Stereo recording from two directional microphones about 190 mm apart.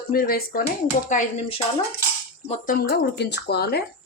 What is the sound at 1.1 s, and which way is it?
Speech, 35° left (ahead or behind).